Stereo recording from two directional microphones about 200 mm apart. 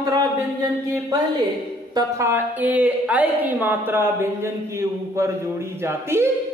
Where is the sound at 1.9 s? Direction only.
15° right (ahead or behind).